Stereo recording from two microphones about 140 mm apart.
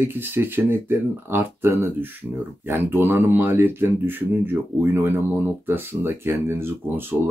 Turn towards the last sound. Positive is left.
turn(degrees=-15)  # may be behind; listen again after turning